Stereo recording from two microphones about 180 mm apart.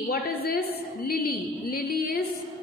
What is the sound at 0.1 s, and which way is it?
A woman's voice, 55° left (ahead or behind).